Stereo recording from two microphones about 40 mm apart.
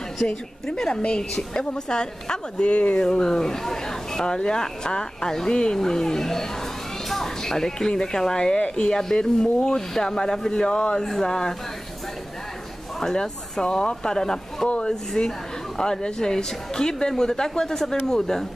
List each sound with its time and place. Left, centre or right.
0.7 s a woman's voice: centre
13.0 s speech: centre